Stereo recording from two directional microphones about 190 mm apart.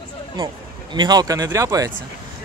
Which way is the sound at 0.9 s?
20° right (ahead or behind).